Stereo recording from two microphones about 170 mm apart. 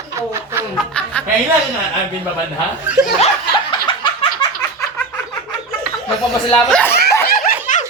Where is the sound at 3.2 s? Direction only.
30° left (ahead or behind).